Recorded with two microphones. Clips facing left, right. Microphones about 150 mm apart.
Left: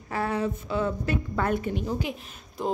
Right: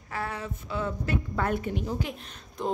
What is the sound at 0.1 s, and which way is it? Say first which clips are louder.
Speech: left 7 dB; 25° left (ahead or behind).